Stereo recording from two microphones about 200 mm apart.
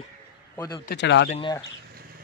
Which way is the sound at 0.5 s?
20° left (ahead or behind).